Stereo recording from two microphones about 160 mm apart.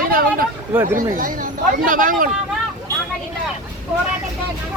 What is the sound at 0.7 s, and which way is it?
Speech, 10° right (ahead or behind).